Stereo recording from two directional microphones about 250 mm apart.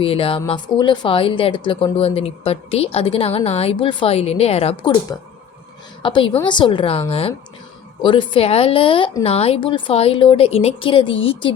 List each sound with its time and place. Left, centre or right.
0.0 s a woman's voice: left